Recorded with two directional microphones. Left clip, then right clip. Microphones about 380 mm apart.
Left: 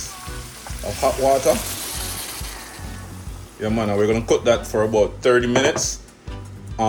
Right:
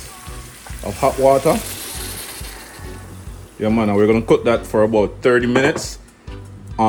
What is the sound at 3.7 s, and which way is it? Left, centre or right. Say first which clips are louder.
Speech: right 4 dB; centre.